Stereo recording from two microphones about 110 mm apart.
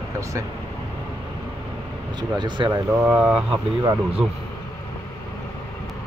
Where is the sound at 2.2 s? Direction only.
45° right (ahead or behind).